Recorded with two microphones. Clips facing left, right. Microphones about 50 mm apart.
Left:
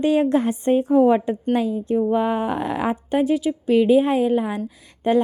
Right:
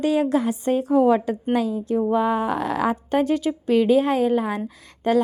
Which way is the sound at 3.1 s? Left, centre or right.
Centre.